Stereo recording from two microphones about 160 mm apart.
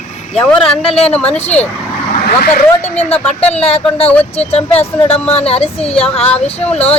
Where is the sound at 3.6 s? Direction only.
35° left (ahead or behind).